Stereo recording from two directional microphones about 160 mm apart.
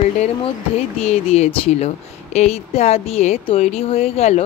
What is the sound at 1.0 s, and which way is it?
Speech, 40° left (ahead or behind).